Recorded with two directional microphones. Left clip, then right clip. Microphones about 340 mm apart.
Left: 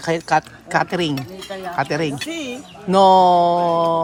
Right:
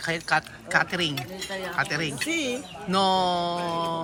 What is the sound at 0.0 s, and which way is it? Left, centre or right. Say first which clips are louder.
Speech: left 7 dB; centre.